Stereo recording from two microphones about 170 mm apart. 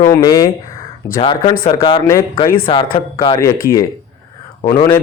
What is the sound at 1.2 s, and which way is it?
A man's voice, 30° left (ahead or behind).